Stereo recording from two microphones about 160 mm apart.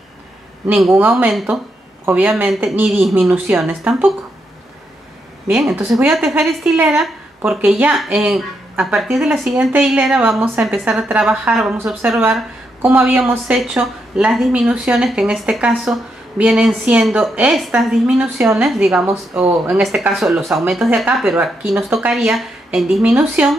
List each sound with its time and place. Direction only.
0.7 s a woman's voice: 5° right (ahead or behind)
6.4 s a woman's voice: 5° right (ahead or behind)